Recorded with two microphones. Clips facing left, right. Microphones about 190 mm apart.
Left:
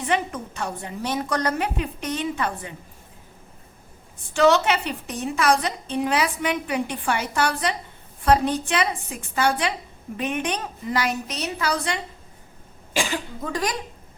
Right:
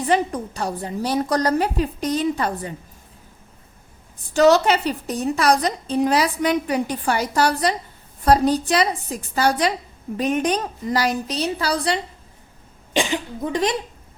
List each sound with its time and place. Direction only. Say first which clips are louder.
0.0 s a woman's voice: right 5 dB; 35° right (ahead or behind)
4.4 s a woman's voice: right 3 dB; 40° right (ahead or behind)
12.9 s speech: right 4 dB; 20° right (ahead or behind)